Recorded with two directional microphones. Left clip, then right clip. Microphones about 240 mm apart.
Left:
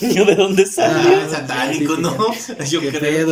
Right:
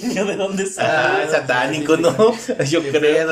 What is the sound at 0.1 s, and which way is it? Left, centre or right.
Speech, left.